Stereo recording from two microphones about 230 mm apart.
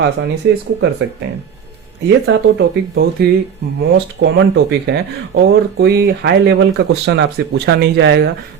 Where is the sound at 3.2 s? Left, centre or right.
Right.